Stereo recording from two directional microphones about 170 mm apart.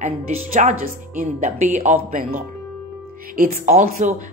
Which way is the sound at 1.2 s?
45° right (ahead or behind).